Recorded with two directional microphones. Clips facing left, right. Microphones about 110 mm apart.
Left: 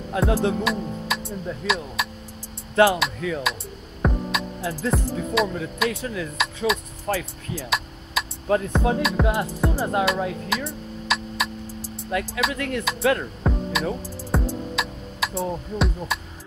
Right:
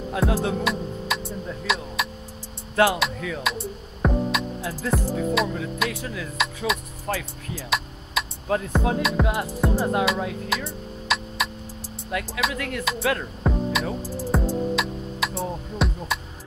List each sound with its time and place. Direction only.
0.1 s speech: centre (ahead or behind)
14.3 s music: centre (ahead or behind)